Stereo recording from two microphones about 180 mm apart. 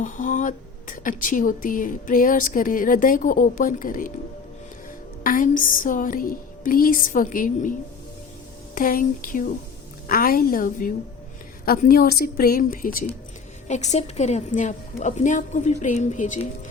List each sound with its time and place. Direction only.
0.0 s speech: 45° left (ahead or behind)
5.2 s speech: 50° left (ahead or behind)
13.7 s a woman's voice: 40° left (ahead or behind)